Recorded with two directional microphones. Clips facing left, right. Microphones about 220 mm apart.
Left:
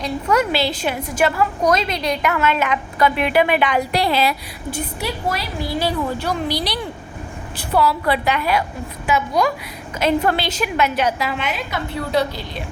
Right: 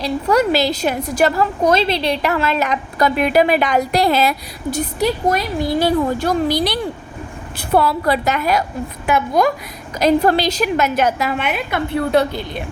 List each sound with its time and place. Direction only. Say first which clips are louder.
0.0 s a woman's voice: right 3 dB; 35° right (ahead or behind); by 9.5 s 50° right (ahead or behind)
10.0 s a woman's voice: right 4 dB; 40° right (ahead or behind); by 12.6 s 55° right (ahead or behind)